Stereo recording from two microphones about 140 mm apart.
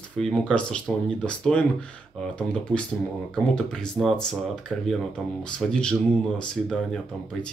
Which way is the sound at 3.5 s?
5° left (ahead or behind).